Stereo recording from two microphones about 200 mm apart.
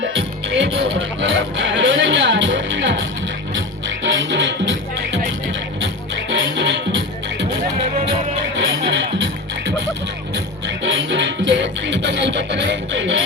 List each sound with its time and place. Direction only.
0.2 s music: 65° right (ahead or behind)
4.0 s music: 65° right (ahead or behind)
6.6 s music: 60° right (ahead or behind)
8.5 s music: 65° right (ahead or behind)
10.8 s music: 65° right (ahead or behind)